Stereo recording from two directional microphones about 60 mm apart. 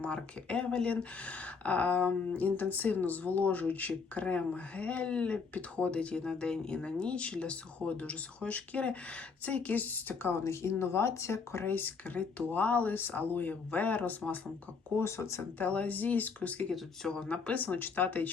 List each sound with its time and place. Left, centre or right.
0.0 s speech: centre
10.3 s speech: left
11.6 s speech: left
14.9 s speech: left
15.5 s speech: left
16.7 s speech: centre
17.7 s speech: left